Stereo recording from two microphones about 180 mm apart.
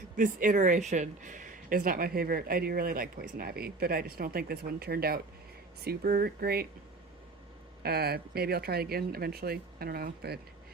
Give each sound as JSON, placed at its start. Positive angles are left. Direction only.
{"t": 0.2, "sound": "speech", "side_deg": -50}
{"t": 7.8, "sound": "speech", "side_deg": -60}